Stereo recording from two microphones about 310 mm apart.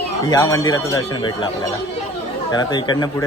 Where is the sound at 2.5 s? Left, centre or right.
Centre.